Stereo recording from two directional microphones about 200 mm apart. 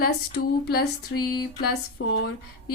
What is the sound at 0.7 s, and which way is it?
A woman's voice, 55° left (ahead or behind).